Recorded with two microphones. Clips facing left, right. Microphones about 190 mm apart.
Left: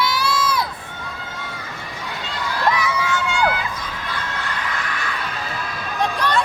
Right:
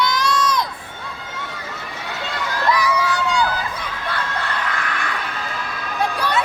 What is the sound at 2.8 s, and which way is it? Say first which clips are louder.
Crowd: right 2 dB; 35° right (ahead or behind).